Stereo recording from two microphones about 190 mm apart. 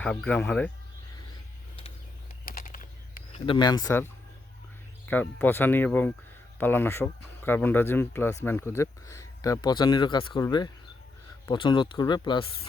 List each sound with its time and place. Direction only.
0.0 s speech: 5° left (ahead or behind)
2.4 s typing: 50° left (ahead or behind)
3.4 s speech: 25° left (ahead or behind)
3.8 s speech: 15° left (ahead or behind)